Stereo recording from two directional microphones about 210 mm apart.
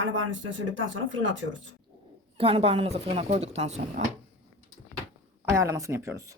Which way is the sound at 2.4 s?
25° right (ahead or behind).